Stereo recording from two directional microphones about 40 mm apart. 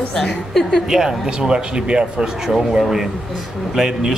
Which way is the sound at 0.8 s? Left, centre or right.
Centre.